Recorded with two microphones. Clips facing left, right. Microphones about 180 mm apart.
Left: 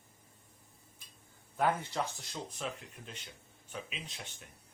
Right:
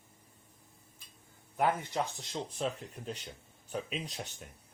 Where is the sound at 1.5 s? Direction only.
15° right (ahead or behind).